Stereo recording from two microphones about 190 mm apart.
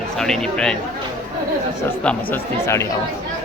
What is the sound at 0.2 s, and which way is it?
Speech, 5° left (ahead or behind).